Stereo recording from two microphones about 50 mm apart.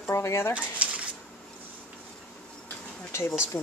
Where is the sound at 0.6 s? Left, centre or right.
Right.